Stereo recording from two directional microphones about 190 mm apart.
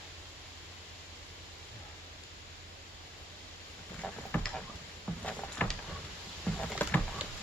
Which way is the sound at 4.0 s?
5° left (ahead or behind).